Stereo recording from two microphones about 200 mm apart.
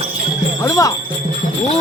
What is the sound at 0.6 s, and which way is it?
Speech, 15° left (ahead or behind).